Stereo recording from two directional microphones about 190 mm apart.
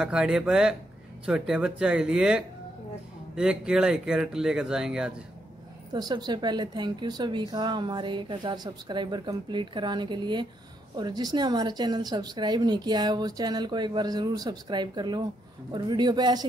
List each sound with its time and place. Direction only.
0.0 s speech: 5° right (ahead or behind)
5.9 s speech: 20° right (ahead or behind)